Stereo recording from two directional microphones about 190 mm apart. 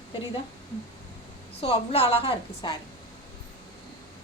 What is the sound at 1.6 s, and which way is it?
A woman's voice, 30° left (ahead or behind).